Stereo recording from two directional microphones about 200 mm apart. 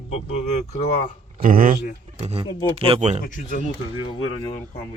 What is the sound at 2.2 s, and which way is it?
Speech, 30° right (ahead or behind).